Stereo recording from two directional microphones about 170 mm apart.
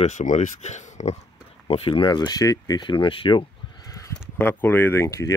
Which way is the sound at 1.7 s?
30° left (ahead or behind).